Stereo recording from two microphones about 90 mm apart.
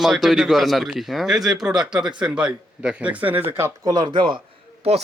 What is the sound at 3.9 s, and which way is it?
Speech, 50° right (ahead or behind).